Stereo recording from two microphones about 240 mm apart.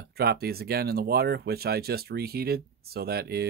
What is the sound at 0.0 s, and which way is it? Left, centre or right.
Speech, right.